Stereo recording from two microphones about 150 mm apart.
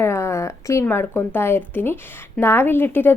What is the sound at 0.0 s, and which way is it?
A woman's voice, 20° left (ahead or behind).